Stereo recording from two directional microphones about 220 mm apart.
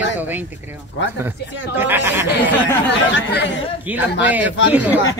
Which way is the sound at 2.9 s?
55° left (ahead or behind).